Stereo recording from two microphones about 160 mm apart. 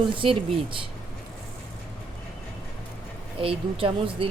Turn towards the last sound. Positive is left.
turn(degrees=-35)  # may be behind; listen again after turning